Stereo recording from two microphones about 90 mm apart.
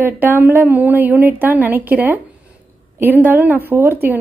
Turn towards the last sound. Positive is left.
turn(degrees=-25)  # may be behind; listen again after turning